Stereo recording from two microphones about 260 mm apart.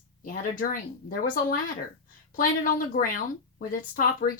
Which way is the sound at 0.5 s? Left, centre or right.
Left.